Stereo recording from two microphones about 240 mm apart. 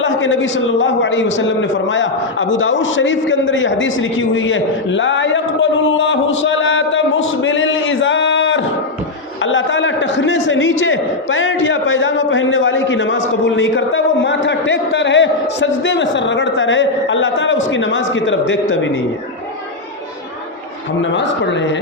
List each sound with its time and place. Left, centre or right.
0.0 s a man's voice: left
9.4 s a sound: left
21.0 s a man's voice: left